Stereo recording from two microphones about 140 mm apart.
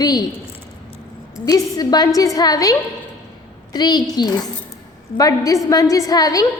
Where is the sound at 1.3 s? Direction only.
25° left (ahead or behind).